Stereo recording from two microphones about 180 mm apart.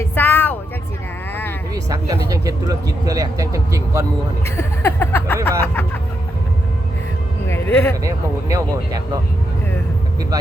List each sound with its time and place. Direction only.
0.0 s vehicle: 10° left (ahead or behind)
1.7 s speech: 20° right (ahead or behind)
4.4 s music: 15° left (ahead or behind)
7.4 s speech: 10° left (ahead or behind)
8.0 s speech: 20° right (ahead or behind)